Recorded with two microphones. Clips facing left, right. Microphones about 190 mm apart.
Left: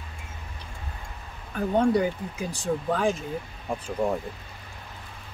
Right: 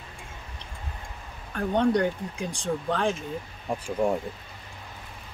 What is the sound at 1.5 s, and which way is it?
Speech, 5° left (ahead or behind).